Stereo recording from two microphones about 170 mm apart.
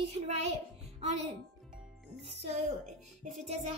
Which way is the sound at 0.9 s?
40° right (ahead or behind).